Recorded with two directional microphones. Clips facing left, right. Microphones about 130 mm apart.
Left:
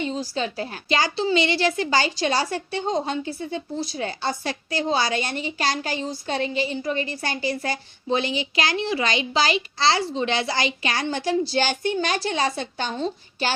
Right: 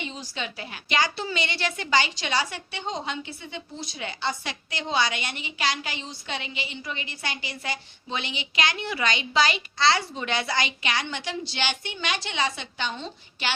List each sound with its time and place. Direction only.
0.0 s a woman's voice: 35° left (ahead or behind)